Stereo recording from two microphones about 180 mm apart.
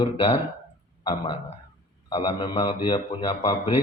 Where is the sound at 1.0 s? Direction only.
25° left (ahead or behind).